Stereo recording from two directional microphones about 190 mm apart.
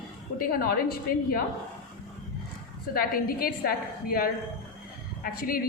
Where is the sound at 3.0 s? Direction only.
50° left (ahead or behind).